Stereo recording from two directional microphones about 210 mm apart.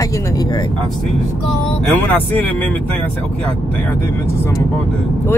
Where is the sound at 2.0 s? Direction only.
10° left (ahead or behind).